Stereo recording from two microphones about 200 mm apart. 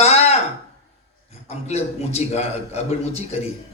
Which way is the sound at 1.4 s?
35° left (ahead or behind).